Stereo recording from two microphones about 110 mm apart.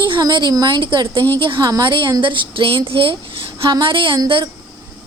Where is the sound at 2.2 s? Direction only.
50° right (ahead or behind).